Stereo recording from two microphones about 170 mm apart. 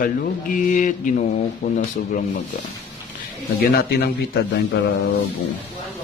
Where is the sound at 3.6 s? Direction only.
65° left (ahead or behind).